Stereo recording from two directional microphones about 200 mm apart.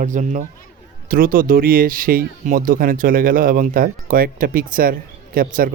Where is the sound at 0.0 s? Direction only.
40° right (ahead or behind).